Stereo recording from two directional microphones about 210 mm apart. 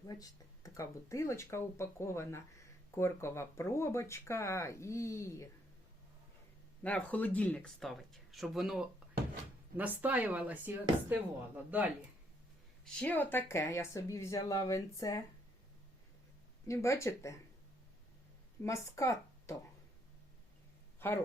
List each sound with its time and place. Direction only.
0.1 s speech: 15° left (ahead or behind)
6.8 s speech: 5° left (ahead or behind)
12.8 s speech: 5° left (ahead or behind)
16.6 s speech: 15° left (ahead or behind)
18.6 s speech: 15° left (ahead or behind)